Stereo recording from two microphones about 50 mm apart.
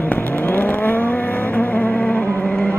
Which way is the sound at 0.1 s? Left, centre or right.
Left.